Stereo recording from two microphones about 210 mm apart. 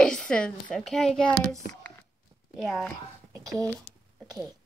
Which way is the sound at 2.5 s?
Centre (ahead or behind).